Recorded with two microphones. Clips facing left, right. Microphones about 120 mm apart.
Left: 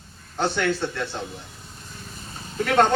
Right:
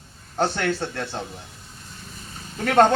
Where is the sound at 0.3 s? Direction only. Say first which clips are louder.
Even; 45° right (ahead or behind).